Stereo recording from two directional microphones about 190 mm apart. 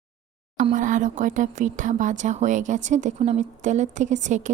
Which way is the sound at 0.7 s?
40° right (ahead or behind).